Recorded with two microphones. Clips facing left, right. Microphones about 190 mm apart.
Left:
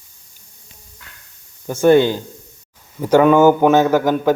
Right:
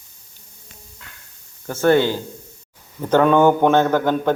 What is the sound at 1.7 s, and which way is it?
A man's voice, 15° left (ahead or behind).